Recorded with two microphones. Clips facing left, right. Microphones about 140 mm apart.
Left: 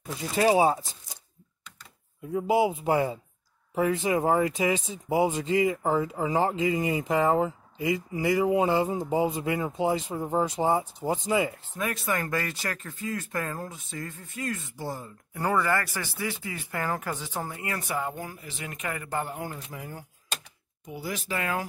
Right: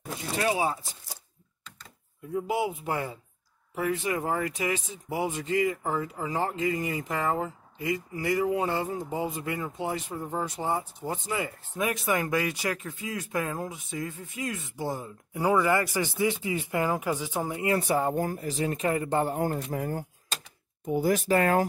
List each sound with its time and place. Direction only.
0.4 s speech: 30° left (ahead or behind)
2.3 s speech: 20° left (ahead or behind)
11.7 s speech: 15° right (ahead or behind)
19.3 s speech: 45° right (ahead or behind)